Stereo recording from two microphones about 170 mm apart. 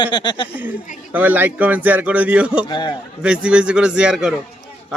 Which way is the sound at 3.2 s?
5° right (ahead or behind).